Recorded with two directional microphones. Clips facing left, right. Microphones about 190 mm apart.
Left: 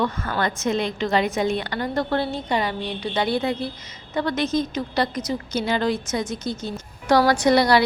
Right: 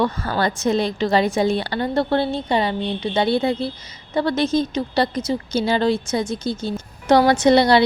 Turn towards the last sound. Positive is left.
turn(degrees=-25)  # may be behind; listen again after turning